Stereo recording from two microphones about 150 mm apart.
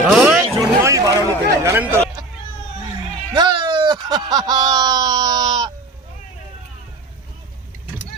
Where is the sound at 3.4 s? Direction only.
30° right (ahead or behind).